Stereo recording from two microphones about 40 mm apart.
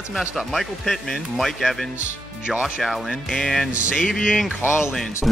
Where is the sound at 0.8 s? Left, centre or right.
Centre.